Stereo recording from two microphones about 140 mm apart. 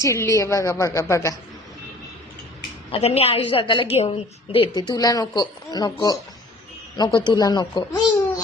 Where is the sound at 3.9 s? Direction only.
50° left (ahead or behind).